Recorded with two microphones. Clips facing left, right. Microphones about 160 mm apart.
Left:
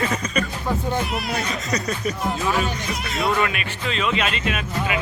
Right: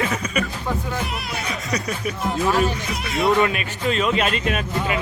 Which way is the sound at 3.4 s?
35° right (ahead or behind).